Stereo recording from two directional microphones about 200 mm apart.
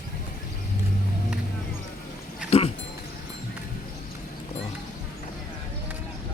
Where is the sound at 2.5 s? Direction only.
30° left (ahead or behind).